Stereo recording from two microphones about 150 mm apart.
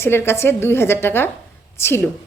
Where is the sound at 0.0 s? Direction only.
15° left (ahead or behind).